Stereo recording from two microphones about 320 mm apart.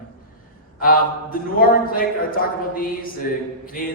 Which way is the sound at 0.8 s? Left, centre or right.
Left.